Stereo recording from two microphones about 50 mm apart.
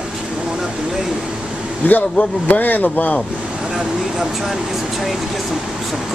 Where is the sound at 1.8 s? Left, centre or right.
Left.